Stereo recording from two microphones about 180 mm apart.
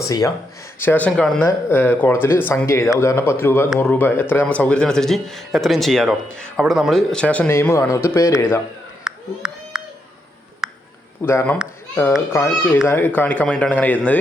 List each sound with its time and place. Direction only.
0.0 s speech: 20° left (ahead or behind)
9.0 s a sound: 5° right (ahead or behind)
11.2 s speech: 15° left (ahead or behind)